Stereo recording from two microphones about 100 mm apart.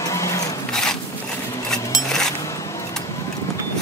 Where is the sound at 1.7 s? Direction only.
5° left (ahead or behind).